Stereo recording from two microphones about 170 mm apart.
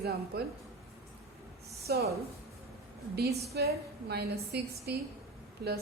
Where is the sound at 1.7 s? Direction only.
65° right (ahead or behind).